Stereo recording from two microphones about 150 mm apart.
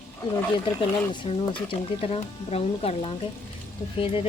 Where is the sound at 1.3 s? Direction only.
35° left (ahead or behind).